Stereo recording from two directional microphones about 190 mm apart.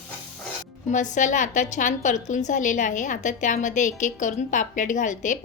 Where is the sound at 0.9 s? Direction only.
40° left (ahead or behind).